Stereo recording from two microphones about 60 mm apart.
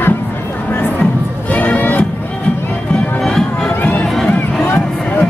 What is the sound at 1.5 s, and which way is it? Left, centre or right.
Music, left.